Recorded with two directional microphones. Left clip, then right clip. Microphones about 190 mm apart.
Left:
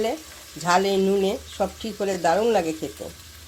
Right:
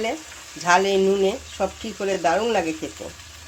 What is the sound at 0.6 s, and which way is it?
Speech, 15° left (ahead or behind).